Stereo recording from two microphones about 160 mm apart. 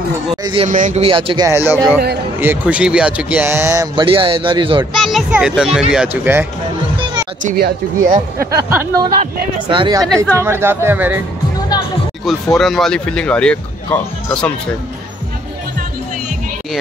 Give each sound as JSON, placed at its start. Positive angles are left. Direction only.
{"t": 0.4, "sound": "a sound", "side_deg": -30}
{"t": 0.7, "sound": "speech", "side_deg": -50}
{"t": 1.0, "sound": "speech", "side_deg": -35}
{"t": 1.5, "sound": "speech", "side_deg": -15}
{"t": 4.0, "sound": "speech", "side_deg": -35}
{"t": 4.9, "sound": "speech", "side_deg": 0}
{"t": 7.4, "sound": "speech", "side_deg": -75}
{"t": 8.5, "sound": "speech", "side_deg": -25}
{"t": 10.0, "sound": "speech", "side_deg": 5}
{"t": 10.3, "sound": "speech", "side_deg": -15}
{"t": 12.3, "sound": "speech", "side_deg": 0}